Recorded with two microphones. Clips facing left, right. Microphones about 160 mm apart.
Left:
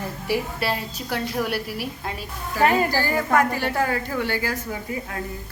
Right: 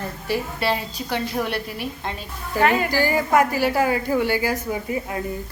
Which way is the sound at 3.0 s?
10° right (ahead or behind).